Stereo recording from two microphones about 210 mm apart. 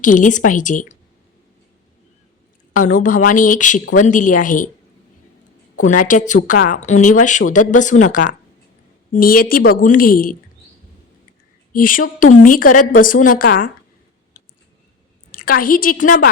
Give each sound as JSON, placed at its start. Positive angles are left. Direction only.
{"t": 0.0, "sound": "speech", "side_deg": 40}
{"t": 2.7, "sound": "speech", "side_deg": 35}
{"t": 5.7, "sound": "a woman's voice", "side_deg": 40}
{"t": 11.7, "sound": "speech", "side_deg": 40}
{"t": 15.3, "sound": "a woman's voice", "side_deg": 45}